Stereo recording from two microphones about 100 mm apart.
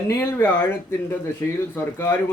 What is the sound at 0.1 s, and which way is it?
Speech, 20° left (ahead or behind).